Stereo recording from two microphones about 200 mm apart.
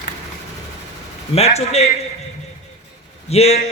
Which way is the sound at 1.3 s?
30° left (ahead or behind).